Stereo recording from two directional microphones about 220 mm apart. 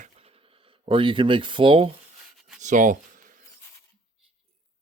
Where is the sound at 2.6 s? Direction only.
35° right (ahead or behind).